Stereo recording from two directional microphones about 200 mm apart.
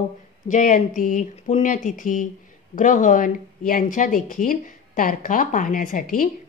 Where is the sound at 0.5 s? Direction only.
40° left (ahead or behind).